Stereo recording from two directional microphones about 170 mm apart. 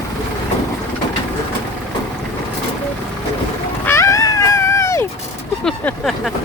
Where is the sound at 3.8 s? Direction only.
15° left (ahead or behind).